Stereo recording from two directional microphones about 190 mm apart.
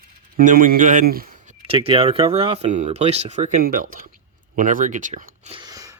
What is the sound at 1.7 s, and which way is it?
Speech, 30° right (ahead or behind).